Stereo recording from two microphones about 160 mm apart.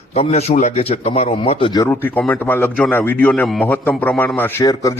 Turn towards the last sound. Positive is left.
turn(degrees=25)  # may be behind; listen again after turning